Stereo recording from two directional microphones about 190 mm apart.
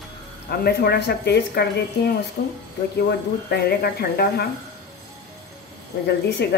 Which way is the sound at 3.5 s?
55° left (ahead or behind).